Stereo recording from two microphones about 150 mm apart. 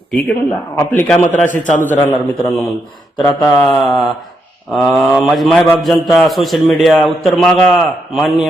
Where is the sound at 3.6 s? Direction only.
Centre (ahead or behind).